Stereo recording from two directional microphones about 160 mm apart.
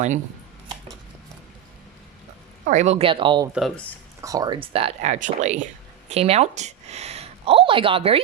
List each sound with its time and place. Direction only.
2.6 s speech: 45° right (ahead or behind); by 4.5 s 20° right (ahead or behind)
4.6 s speech: 35° right (ahead or behind)